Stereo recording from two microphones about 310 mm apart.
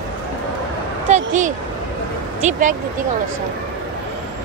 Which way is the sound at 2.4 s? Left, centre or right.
Right.